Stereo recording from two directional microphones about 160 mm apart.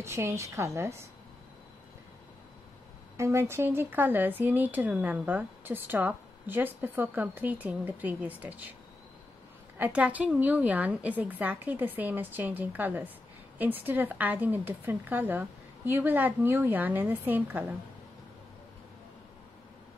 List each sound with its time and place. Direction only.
0.0 s speech: 15° right (ahead or behind)
3.2 s speech: 15° right (ahead or behind)
9.8 s speech: 10° right (ahead or behind)